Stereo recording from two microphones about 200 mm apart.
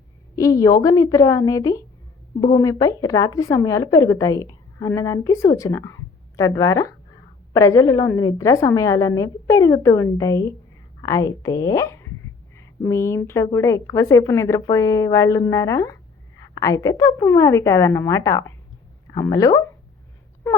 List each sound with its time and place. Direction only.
0.3 s a woman's voice: 15° left (ahead or behind)